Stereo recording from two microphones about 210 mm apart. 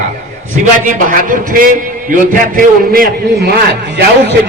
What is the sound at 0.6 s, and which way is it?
A man's voice, 40° right (ahead or behind).